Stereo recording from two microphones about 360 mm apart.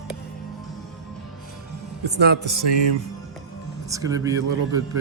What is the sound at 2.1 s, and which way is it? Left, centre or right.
Speech, right.